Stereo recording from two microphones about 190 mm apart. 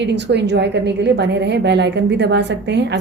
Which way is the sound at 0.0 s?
65° right (ahead or behind).